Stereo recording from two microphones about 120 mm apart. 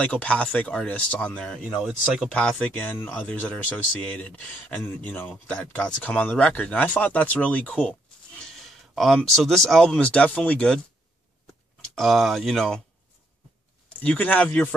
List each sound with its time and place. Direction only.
0.0 s speech: 10° left (ahead or behind)
2.3 s speech: 10° left (ahead or behind)
11.9 s speech: centre (ahead or behind)
13.8 s speech: 10° left (ahead or behind)